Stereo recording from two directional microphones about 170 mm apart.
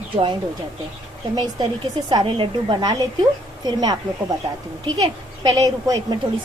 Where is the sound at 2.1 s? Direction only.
30° right (ahead or behind).